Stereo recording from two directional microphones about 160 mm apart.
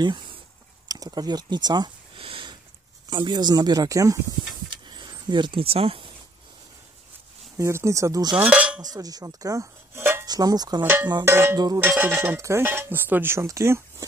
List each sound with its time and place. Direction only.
0.0 s a sound: 30° right (ahead or behind)
3.1 s speech: 30° right (ahead or behind)
4.6 s a sound: 30° right (ahead or behind)
7.5 s speech: 20° right (ahead or behind)
8.3 s speech: 10° right (ahead or behind)
8.9 s speech: 25° right (ahead or behind)
10.8 s speech: 10° right (ahead or behind)
11.5 s speech: 25° right (ahead or behind)
11.8 s speech: 10° right (ahead or behind)